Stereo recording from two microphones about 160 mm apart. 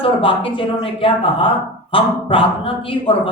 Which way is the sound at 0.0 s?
35° left (ahead or behind).